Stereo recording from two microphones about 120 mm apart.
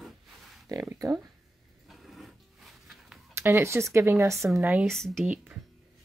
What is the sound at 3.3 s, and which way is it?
Speech, 20° right (ahead or behind).